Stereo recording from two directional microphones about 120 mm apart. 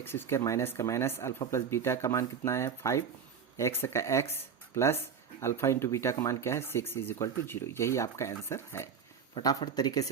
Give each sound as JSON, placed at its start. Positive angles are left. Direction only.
{"t": 0.0, "sound": "speech", "side_deg": 20}
{"t": 9.4, "sound": "speech", "side_deg": 30}